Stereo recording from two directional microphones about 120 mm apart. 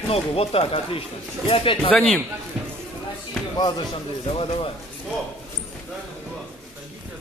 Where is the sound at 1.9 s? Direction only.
10° left (ahead or behind).